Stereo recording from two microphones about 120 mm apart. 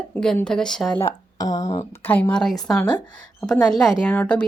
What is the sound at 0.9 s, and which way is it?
Speech, 30° left (ahead or behind).